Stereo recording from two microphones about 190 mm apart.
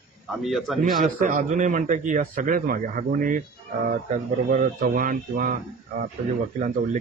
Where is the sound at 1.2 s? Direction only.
45° right (ahead or behind).